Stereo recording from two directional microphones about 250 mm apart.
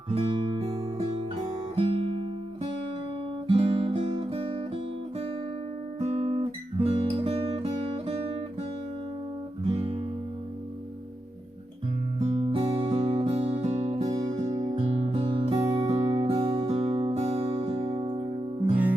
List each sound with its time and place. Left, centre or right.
0.1 s guitar: centre
1.7 s music: right
3.4 s music: right
6.0 s guitar: right
9.6 s music: right
12.2 s music: right